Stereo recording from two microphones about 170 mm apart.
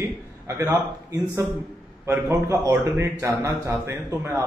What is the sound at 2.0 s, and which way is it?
A man's voice, 15° right (ahead or behind).